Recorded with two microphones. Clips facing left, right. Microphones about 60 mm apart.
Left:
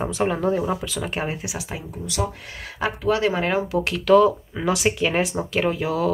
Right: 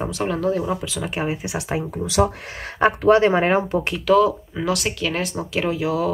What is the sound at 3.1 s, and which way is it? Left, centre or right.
Speech, right.